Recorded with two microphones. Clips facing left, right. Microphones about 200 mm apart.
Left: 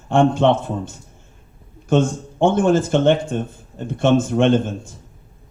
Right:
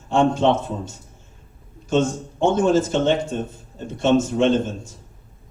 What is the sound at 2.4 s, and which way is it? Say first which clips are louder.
Speech: left 2 dB; 55° left (ahead or behind).